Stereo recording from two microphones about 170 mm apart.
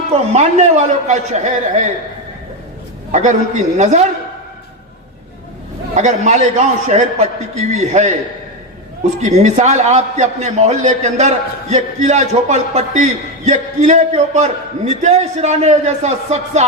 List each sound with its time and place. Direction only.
0.1 s a man's voice: 40° right (ahead or behind)
3.1 s a man's voice: 45° right (ahead or behind)
5.9 s a man's voice: 45° right (ahead or behind)
9.2 s a man's voice: 45° right (ahead or behind)